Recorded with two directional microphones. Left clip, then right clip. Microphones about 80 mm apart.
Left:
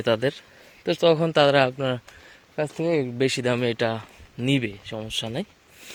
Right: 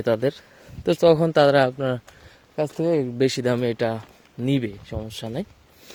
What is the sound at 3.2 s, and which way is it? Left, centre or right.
Speech, right.